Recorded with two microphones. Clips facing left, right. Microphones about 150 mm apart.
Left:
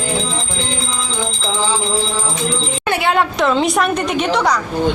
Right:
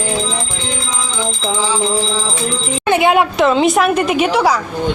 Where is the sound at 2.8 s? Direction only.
20° right (ahead or behind).